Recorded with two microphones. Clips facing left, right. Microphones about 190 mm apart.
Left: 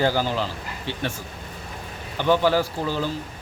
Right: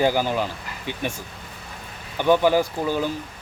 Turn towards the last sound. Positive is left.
turn(degrees=-15)  # may be behind; listen again after turning